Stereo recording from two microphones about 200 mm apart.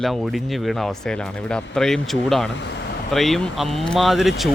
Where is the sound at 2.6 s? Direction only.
60° left (ahead or behind).